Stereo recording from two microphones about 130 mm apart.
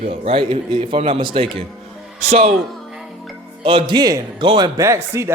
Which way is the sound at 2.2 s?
55° right (ahead or behind).